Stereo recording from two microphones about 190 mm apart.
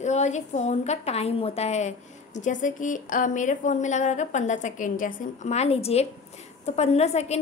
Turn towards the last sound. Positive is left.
turn(degrees=35)  # may be behind; listen again after turning